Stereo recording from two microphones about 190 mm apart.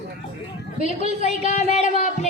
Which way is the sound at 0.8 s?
35° left (ahead or behind).